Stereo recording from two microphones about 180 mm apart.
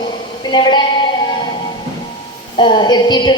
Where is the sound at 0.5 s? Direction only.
25° left (ahead or behind).